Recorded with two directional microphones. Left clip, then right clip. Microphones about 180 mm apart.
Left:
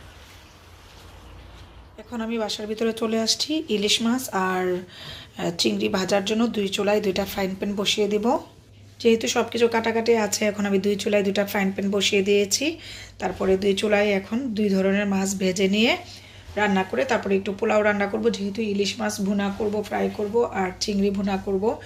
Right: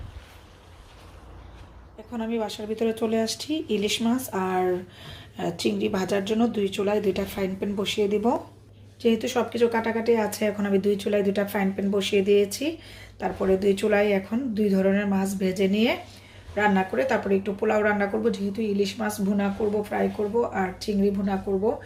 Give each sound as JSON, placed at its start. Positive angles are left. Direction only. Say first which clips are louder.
{"t": 2.0, "sound": "speech", "louder": "left 2 dB", "side_deg": 0}